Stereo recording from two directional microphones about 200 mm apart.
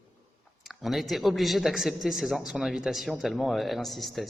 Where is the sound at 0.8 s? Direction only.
Centre (ahead or behind).